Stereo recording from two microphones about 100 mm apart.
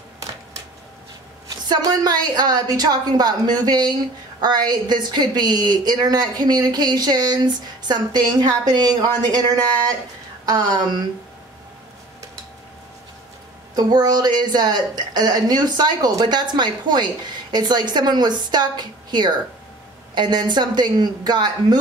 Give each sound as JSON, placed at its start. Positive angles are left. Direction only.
{"t": 1.7, "sound": "a woman's voice", "side_deg": -45}
{"t": 10.4, "sound": "speech", "side_deg": -40}
{"t": 13.7, "sound": "a woman's voice", "side_deg": -45}